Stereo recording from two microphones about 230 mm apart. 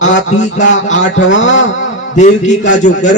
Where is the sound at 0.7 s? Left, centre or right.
Left.